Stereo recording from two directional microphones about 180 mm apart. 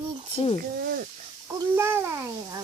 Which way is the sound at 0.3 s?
30° left (ahead or behind).